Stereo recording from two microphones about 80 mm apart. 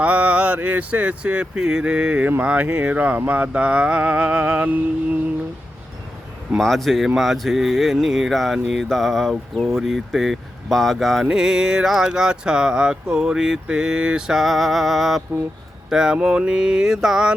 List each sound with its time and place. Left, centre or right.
0.0 s speech: centre
6.6 s speech: centre